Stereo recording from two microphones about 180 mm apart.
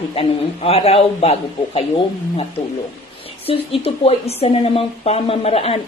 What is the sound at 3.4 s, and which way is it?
A woman's voice, 30° left (ahead or behind).